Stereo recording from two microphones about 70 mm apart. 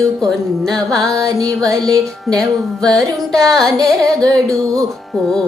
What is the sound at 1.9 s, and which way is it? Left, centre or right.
Music, centre.